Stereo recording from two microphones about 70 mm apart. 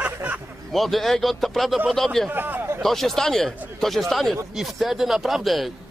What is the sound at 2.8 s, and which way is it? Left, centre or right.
Speech, centre.